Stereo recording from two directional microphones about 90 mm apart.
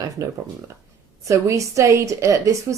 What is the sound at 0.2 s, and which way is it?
A woman's voice, 35° right (ahead or behind).